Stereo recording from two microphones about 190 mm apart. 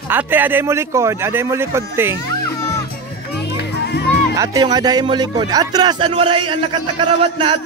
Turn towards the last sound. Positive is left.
turn(degrees=-25)  # may be behind; listen again after turning